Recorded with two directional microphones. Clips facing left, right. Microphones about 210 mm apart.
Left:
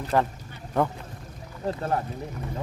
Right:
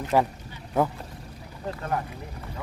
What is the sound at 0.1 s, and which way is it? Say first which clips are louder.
Speech: right 1 dB; 10° right (ahead or behind).